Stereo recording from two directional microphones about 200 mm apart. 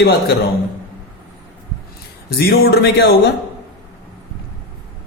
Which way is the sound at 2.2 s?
50° left (ahead or behind).